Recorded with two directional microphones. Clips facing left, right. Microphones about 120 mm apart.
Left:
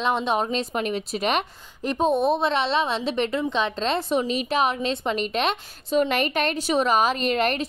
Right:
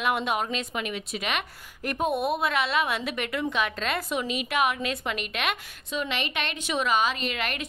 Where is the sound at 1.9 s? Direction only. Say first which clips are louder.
Left 5 dB; 25° left (ahead or behind); by 7.6 s 40° left (ahead or behind).